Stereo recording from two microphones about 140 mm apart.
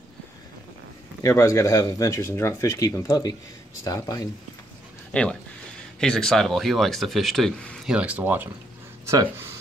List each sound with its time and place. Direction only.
1.2 s speech: 25° left (ahead or behind)
5.1 s speech: 5° left (ahead or behind)
7.9 s speech: 10° right (ahead or behind)